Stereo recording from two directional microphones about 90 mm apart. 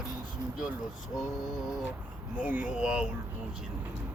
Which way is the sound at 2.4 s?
15° right (ahead or behind).